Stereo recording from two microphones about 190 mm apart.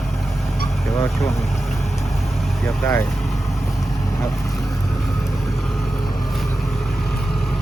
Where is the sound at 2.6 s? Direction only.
10° left (ahead or behind).